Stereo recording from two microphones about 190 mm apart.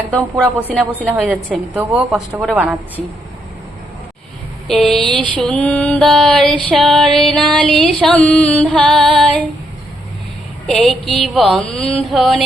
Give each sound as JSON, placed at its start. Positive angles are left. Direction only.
{"t": 0.1, "sound": "a woman's voice", "side_deg": 5}
{"t": 1.1, "sound": "a woman's voice", "side_deg": -10}
{"t": 4.7, "sound": "mantra", "side_deg": 5}
{"t": 10.7, "sound": "mantra", "side_deg": 0}